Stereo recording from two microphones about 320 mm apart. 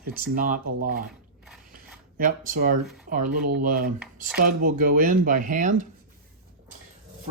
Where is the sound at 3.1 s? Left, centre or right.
Right.